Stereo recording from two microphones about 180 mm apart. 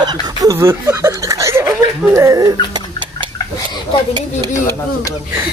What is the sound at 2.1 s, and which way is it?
Dog, 15° right (ahead or behind).